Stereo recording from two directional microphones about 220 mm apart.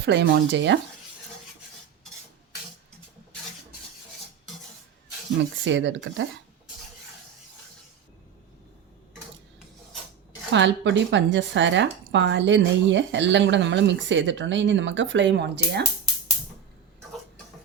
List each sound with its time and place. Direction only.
0.0 s speech: 55° right (ahead or behind)
5.6 s speech: 55° right (ahead or behind)
10.5 s speech: 55° right (ahead or behind)